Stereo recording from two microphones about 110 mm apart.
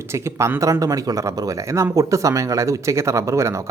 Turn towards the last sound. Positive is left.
turn(degrees=-25)  # may be behind; listen again after turning